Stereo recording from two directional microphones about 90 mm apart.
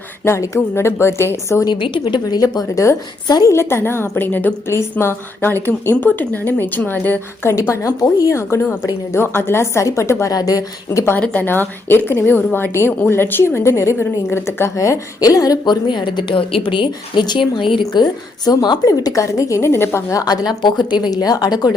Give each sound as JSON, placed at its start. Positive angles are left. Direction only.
{"t": 0.3, "sound": "a woman's voice", "side_deg": 35}
{"t": 1.6, "sound": "a woman's voice", "side_deg": 60}
{"t": 3.2, "sound": "a woman's voice", "side_deg": 50}
{"t": 3.5, "sound": "a woman's voice", "side_deg": 30}
{"t": 11.2, "sound": "a woman's voice", "side_deg": 15}
{"t": 11.9, "sound": "a woman's voice", "side_deg": 25}
{"t": 18.0, "sound": "a woman's voice", "side_deg": 50}
{"t": 20.1, "sound": "a woman's voice", "side_deg": 50}